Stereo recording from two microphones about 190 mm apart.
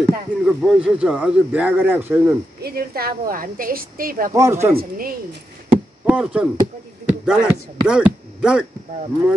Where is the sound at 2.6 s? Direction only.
55° right (ahead or behind).